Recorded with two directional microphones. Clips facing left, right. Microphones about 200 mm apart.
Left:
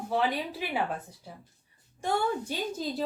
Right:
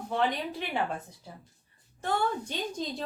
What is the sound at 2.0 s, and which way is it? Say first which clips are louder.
A woman's voice: left 1 dB; 10° left (ahead or behind).